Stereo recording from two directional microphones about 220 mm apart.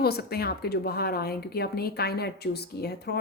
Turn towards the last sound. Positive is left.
turn(degrees=45)  # may be behind; listen again after turning